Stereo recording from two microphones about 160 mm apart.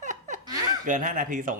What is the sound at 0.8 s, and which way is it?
Speech, 55° right (ahead or behind).